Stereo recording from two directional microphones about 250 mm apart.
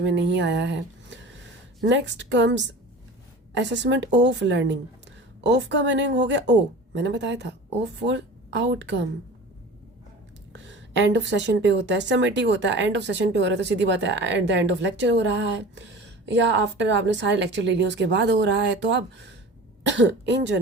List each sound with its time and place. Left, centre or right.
0.0 s a woman's voice: right
10.5 s a woman's voice: right